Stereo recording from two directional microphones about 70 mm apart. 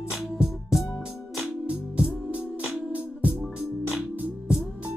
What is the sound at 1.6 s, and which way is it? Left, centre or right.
Music, centre.